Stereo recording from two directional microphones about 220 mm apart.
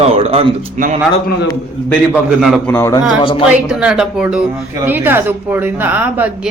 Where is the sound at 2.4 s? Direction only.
Centre (ahead or behind).